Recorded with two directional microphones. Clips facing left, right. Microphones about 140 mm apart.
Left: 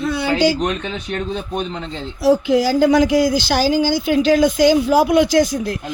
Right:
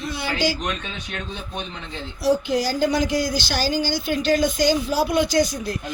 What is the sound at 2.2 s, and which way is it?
Speech, 90° left.